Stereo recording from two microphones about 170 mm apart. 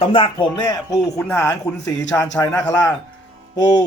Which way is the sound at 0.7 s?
20° left (ahead or behind).